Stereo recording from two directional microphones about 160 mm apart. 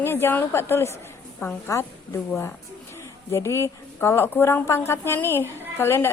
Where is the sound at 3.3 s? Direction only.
15° left (ahead or behind).